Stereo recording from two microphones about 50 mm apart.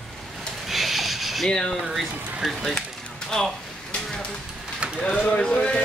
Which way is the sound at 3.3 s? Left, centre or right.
Centre.